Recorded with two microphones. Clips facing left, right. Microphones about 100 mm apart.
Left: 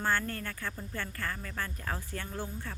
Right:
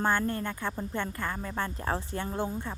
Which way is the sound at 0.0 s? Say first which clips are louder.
Right 4 dB; 20° right (ahead or behind).